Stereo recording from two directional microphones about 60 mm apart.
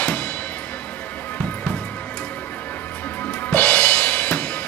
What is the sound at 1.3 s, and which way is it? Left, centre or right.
Music, left.